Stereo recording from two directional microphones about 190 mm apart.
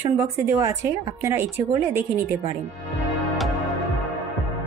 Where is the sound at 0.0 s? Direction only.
15° right (ahead or behind).